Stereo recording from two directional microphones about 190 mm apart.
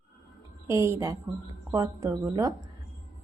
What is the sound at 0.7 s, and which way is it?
A woman's voice, 15° right (ahead or behind).